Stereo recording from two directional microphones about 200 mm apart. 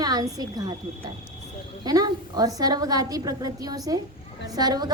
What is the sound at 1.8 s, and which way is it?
A woman's voice, 20° right (ahead or behind).